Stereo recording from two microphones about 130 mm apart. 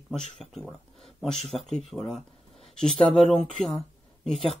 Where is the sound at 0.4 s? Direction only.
Centre (ahead or behind).